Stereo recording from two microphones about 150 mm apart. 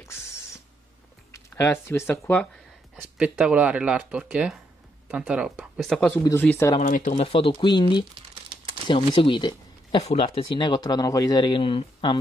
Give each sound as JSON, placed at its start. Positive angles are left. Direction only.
{"t": 1.3, "sound": "speech", "side_deg": 20}
{"t": 3.2, "sound": "speech", "side_deg": -5}
{"t": 6.9, "sound": "speech", "side_deg": 55}